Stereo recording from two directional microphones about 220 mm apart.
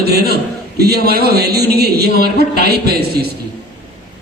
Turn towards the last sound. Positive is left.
turn(degrees=-45)  # may be behind; listen again after turning